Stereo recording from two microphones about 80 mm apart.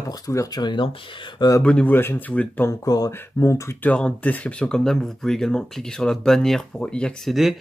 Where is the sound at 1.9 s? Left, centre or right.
Left.